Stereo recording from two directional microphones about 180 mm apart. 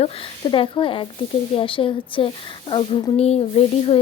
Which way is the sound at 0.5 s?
30° left (ahead or behind).